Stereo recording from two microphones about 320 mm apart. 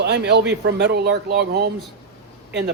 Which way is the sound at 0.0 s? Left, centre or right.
Right.